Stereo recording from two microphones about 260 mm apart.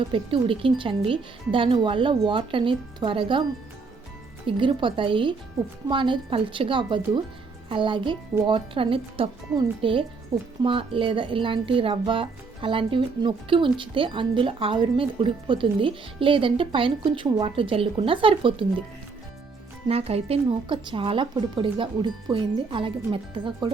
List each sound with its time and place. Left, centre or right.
0.0 s a woman's voice: centre
4.4 s a woman's voice: centre
19.9 s a woman's voice: right